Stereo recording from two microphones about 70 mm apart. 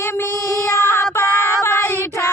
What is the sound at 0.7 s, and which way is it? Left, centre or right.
Child singing, left.